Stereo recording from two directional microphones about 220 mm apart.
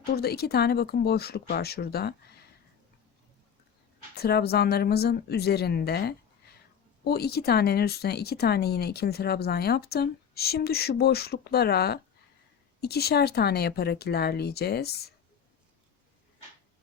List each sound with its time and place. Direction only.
0.0 s speech: 45° left (ahead or behind)
4.1 s speech: 45° left (ahead or behind)